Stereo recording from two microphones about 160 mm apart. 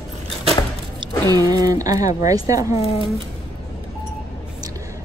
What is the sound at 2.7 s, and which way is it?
Speech, 40° left (ahead or behind).